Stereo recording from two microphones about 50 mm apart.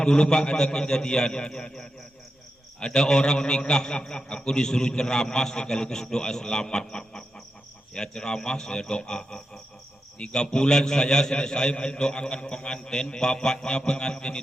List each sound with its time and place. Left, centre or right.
0.0 s a man's voice: centre